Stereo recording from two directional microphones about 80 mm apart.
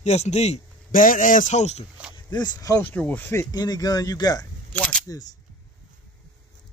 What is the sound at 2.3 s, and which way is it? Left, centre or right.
Speech, left.